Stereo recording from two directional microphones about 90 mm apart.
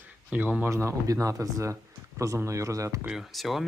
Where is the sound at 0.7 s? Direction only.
35° right (ahead or behind).